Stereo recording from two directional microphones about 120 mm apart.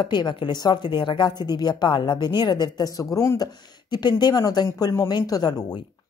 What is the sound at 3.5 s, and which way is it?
Speech, 35° left (ahead or behind).